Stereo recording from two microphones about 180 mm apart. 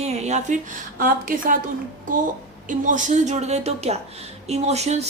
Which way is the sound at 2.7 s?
45° right (ahead or behind).